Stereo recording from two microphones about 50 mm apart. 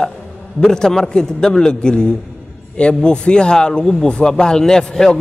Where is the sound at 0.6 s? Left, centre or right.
Centre.